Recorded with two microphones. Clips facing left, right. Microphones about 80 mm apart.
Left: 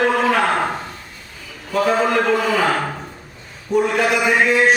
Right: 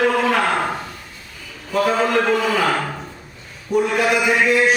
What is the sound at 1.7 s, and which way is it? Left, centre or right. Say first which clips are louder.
Speech: left 1 dB; centre.